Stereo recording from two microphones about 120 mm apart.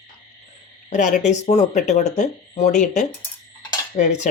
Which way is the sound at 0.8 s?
85° left.